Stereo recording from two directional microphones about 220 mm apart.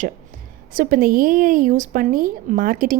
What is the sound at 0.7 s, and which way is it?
A woman's voice, 40° right (ahead or behind).